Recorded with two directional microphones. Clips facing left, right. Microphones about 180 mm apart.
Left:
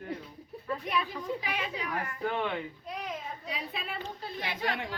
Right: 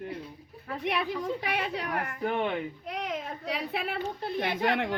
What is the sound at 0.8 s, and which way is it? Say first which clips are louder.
Speech: right 7 dB; 70° right (ahead or behind).